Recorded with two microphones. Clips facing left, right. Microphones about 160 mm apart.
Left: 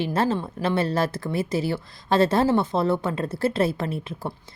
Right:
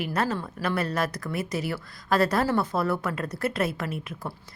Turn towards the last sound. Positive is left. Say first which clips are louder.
# left 4 dB
turn(degrees=30)  # may be behind; listen again after turning